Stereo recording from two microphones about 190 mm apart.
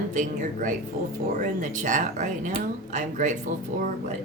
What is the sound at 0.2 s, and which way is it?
Speech, 40° right (ahead or behind).